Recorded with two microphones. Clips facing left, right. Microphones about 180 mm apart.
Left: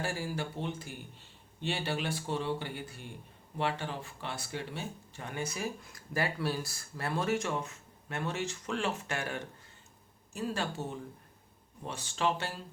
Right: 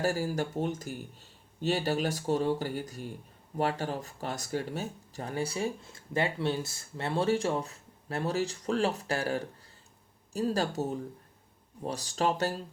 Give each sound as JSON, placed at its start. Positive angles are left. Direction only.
{"t": 0.0, "sound": "speech", "side_deg": -40}